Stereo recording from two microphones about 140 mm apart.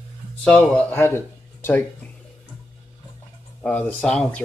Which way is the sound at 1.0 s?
15° left (ahead or behind).